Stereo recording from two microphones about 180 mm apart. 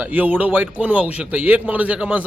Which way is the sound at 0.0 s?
10° right (ahead or behind).